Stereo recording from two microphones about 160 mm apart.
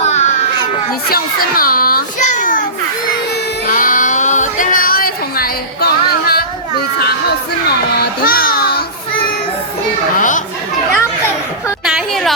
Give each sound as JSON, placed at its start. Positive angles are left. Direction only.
{"t": 0.0, "sound": "baby cry", "side_deg": 45}
{"t": 1.1, "sound": "a child's voice", "side_deg": 65}
{"t": 3.7, "sound": "a sound", "side_deg": 55}
{"t": 7.9, "sound": "music", "side_deg": 65}
{"t": 10.2, "sound": "chatter", "side_deg": 55}
{"t": 11.9, "sound": "a sound", "side_deg": 0}